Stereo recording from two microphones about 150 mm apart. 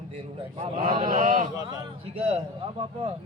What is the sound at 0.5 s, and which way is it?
Speech, 40° right (ahead or behind).